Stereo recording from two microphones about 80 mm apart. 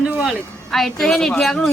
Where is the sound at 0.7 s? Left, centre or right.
Centre.